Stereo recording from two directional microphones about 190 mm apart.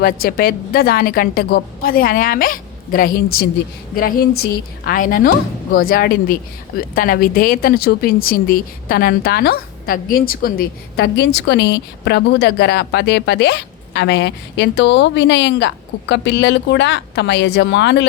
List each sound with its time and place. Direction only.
0.0 s a woman's voice: 50° left (ahead or behind)